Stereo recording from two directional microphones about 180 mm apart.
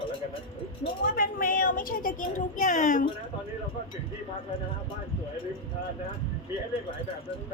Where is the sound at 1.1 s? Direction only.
50° left (ahead or behind).